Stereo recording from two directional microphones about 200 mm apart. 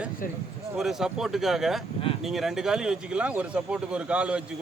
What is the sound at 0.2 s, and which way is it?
Speech, 45° left (ahead or behind).